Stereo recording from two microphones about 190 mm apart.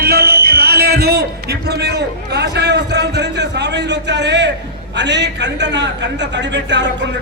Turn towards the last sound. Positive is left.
turn(degrees=-70)  # may be behind; listen again after turning